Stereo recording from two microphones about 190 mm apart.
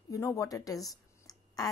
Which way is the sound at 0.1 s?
15° left (ahead or behind).